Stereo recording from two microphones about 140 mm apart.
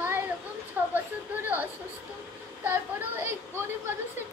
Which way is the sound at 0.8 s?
15° right (ahead or behind).